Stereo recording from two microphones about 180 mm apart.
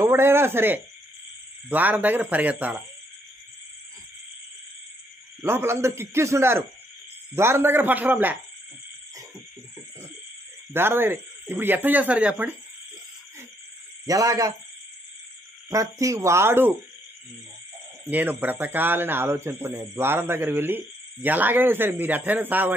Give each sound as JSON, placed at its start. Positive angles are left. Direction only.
{"t": 0.0, "sound": "speech", "side_deg": -15}
{"t": 5.4, "sound": "speech", "side_deg": -15}
{"t": 10.7, "sound": "speech", "side_deg": -10}
{"t": 14.0, "sound": "speech", "side_deg": -20}
{"t": 15.7, "sound": "speech", "side_deg": -15}
{"t": 18.0, "sound": "speech", "side_deg": -10}